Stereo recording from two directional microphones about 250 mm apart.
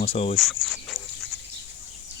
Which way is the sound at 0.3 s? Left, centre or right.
Centre.